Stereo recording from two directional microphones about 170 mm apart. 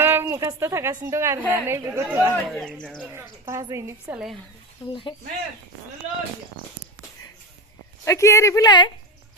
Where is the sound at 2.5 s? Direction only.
Centre (ahead or behind).